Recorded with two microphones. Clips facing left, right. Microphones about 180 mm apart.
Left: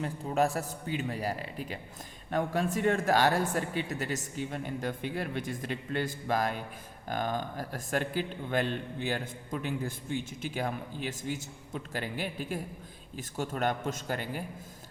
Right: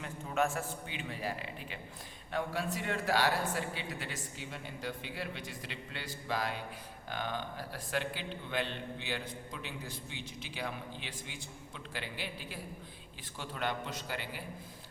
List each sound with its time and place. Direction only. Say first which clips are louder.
0.0 s a man's voice: left 5 dB; 35° left (ahead or behind)